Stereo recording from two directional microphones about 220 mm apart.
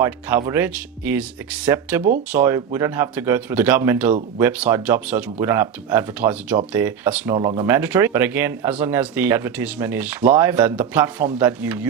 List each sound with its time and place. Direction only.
0.0 s speech: 15° right (ahead or behind)
7.3 s speech: 20° right (ahead or behind)
7.7 s speech: 10° right (ahead or behind)